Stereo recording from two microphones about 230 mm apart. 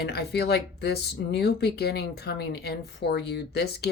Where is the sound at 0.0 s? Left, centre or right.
Left.